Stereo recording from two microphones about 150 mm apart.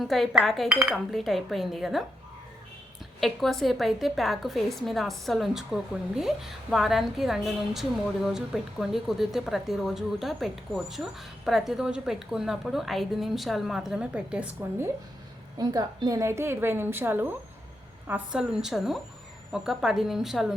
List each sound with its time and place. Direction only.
0.0 s a woman's voice: centre (ahead or behind)
3.2 s a woman's voice: centre (ahead or behind)
15.5 s a woman's voice: 25° right (ahead or behind); by 20.5 s centre (ahead or behind)